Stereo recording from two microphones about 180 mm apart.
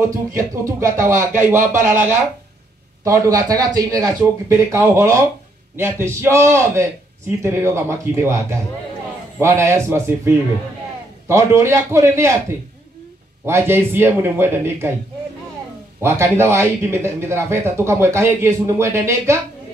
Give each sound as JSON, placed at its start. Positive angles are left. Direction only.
{"t": 0.1, "sound": "speech", "side_deg": -15}
{"t": 13.5, "sound": "speech", "side_deg": -15}
{"t": 16.0, "sound": "speech", "side_deg": -15}